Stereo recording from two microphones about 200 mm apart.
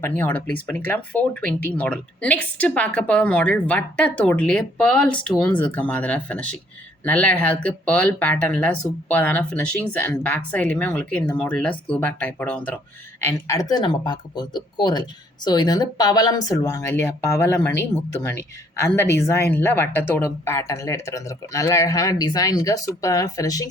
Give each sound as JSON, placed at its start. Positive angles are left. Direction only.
{"t": 0.0, "sound": "speech", "side_deg": 10}